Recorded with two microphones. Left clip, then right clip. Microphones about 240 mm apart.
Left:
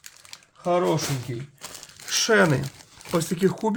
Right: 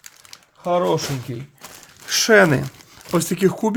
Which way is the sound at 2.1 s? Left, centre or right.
Right.